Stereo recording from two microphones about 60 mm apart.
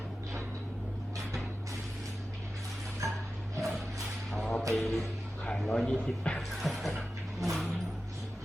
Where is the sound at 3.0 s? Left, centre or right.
Right.